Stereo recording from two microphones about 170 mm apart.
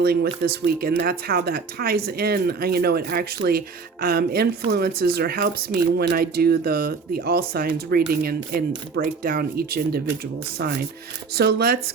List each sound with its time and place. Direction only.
0.0 s speech: 65° right (ahead or behind)
11.3 s speech: 70° right (ahead or behind)